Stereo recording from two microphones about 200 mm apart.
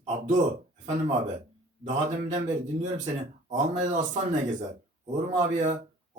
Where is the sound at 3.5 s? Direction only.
35° right (ahead or behind).